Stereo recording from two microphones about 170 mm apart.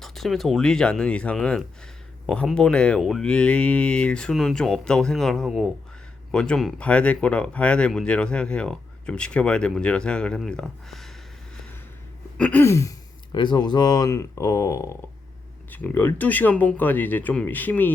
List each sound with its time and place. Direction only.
0.0 s speech: centre (ahead or behind)
12.4 s speech: 10° left (ahead or behind)